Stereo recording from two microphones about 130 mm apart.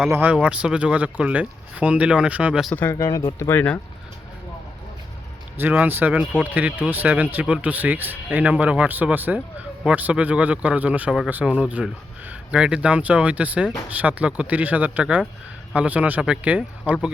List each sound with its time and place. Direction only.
0.1 s speech: 15° right (ahead or behind)
2.7 s speech: 20° left (ahead or behind)
3.0 s speech: 30° left (ahead or behind)
3.3 s speech: 20° left (ahead or behind)
5.5 s speech: 15° right (ahead or behind)